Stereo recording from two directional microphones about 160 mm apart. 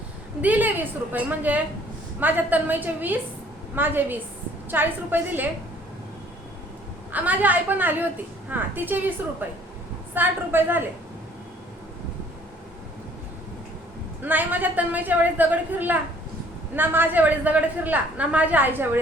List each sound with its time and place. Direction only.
0.4 s a woman's voice: 10° right (ahead or behind)
7.1 s a woman's voice: 10° right (ahead or behind)
14.2 s a woman's voice: 10° right (ahead or behind)